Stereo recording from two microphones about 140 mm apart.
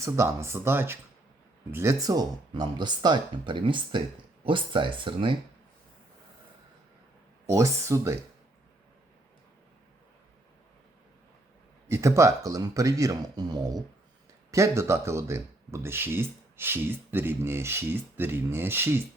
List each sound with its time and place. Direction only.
0.0 s speech: 20° right (ahead or behind); by 5.4 s 35° right (ahead or behind)
7.4 s speech: 20° right (ahead or behind)
11.9 s speech: 20° right (ahead or behind)